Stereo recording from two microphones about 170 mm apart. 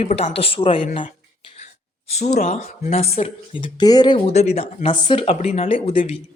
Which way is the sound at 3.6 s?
25° left (ahead or behind).